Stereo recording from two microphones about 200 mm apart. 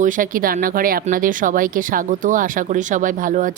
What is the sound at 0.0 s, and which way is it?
Speech, 40° right (ahead or behind).